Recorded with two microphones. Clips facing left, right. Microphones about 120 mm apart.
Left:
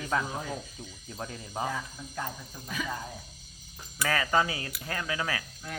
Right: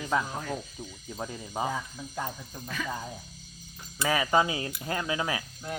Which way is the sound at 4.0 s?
15° right (ahead or behind).